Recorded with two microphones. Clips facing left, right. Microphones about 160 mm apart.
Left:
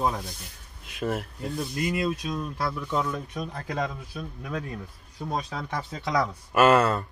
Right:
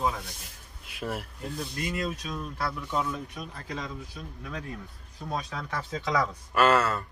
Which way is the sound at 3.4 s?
50° left (ahead or behind).